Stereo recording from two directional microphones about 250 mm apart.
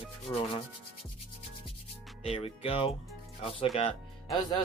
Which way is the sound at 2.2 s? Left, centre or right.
Left.